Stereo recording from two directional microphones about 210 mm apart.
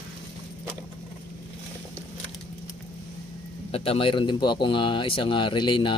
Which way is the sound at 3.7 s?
30° left (ahead or behind).